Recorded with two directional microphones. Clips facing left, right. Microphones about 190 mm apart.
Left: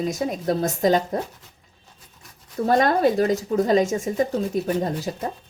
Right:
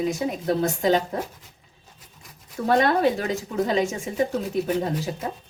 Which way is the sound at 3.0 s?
40° left (ahead or behind).